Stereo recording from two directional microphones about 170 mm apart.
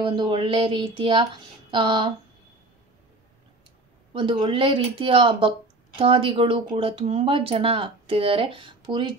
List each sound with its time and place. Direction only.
0.0 s speech: 30° right (ahead or behind)
4.1 s speech: 30° right (ahead or behind)